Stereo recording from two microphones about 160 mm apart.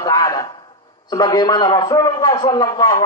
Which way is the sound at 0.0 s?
20° left (ahead or behind).